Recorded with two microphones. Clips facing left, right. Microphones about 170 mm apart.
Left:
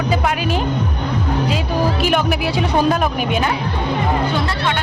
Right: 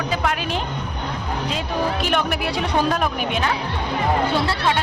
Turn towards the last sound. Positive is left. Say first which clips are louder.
# even
turn(degrees=-30)  # may be behind; listen again after turning